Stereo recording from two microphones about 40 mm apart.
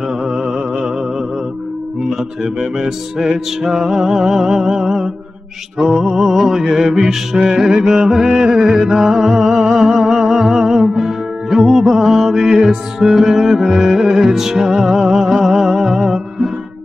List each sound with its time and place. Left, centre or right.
0.2 s music: centre
6.1 s music: centre
8.9 s music: centre
11.8 s mantra: centre
13.0 s music: centre